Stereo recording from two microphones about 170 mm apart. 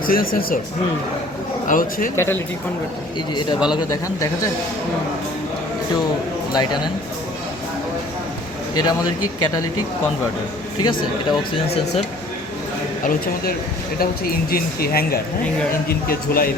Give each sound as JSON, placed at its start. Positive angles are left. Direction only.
{"t": 0.1, "sound": "speech", "side_deg": 55}
{"t": 1.6, "sound": "speech", "side_deg": 55}
{"t": 2.1, "sound": "speech", "side_deg": 15}
{"t": 6.5, "sound": "speech", "side_deg": 25}
{"t": 8.8, "sound": "speech", "side_deg": 25}
{"t": 10.8, "sound": "speech", "side_deg": 25}
{"t": 13.1, "sound": "speech", "side_deg": 60}